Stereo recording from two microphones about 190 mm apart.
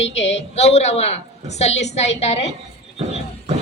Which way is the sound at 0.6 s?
35° left (ahead or behind).